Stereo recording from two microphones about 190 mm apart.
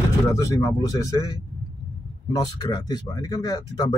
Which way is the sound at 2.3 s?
20° left (ahead or behind).